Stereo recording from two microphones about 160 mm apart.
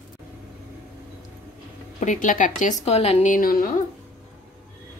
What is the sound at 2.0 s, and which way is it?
Speech, 55° left (ahead or behind).